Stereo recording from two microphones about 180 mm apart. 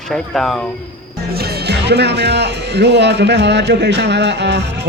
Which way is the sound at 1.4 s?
60° right (ahead or behind).